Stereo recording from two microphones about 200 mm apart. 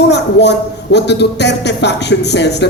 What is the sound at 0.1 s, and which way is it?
A man's voice, 60° left (ahead or behind).